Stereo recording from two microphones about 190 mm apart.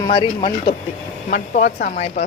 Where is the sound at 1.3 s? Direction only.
40° left (ahead or behind).